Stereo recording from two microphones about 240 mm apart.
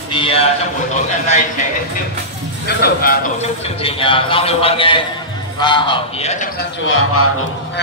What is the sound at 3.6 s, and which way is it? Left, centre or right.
A man's voice, left.